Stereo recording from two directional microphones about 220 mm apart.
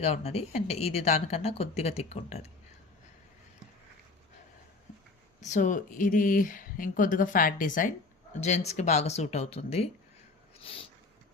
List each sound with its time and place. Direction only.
0.0 s speech: 30° left (ahead or behind)
5.4 s speech: 35° left (ahead or behind)
10.6 s a sound: 25° left (ahead or behind)